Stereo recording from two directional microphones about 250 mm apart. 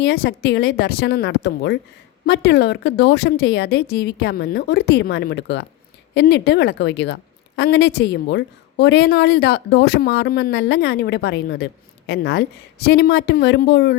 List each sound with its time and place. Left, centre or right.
0.0 s a woman's voice: left